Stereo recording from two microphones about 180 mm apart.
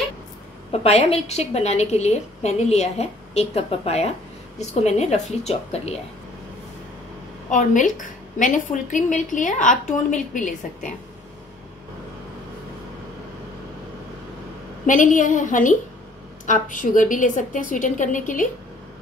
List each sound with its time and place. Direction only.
0.7 s a woman's voice: 35° left (ahead or behind)
7.5 s a woman's voice: 45° left (ahead or behind)
14.9 s a woman's voice: 45° left (ahead or behind)